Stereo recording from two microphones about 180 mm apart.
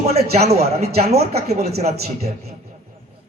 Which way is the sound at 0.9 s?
35° right (ahead or behind).